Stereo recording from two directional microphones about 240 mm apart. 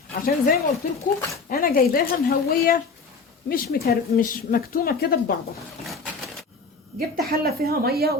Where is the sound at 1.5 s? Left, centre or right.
Left.